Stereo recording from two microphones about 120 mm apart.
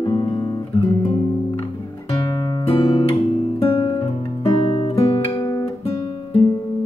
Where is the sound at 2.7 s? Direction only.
50° left (ahead or behind).